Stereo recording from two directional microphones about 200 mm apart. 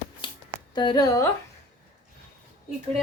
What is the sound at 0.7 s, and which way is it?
Speech, 20° left (ahead or behind).